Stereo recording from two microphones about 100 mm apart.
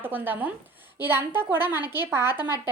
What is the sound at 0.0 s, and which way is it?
A woman's voice, 20° right (ahead or behind).